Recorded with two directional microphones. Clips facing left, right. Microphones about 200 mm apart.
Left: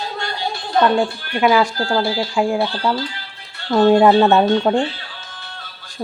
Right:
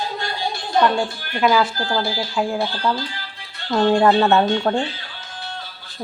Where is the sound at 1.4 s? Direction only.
5° left (ahead or behind).